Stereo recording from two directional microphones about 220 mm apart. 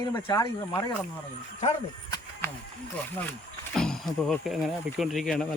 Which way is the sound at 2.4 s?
10° left (ahead or behind).